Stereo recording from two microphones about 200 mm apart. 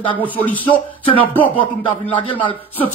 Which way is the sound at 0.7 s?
25° left (ahead or behind).